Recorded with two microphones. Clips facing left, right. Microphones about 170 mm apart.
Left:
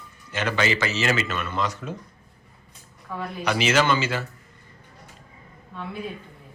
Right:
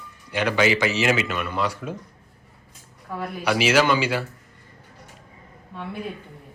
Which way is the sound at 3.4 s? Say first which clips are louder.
Right 2 dB; 10° right (ahead or behind).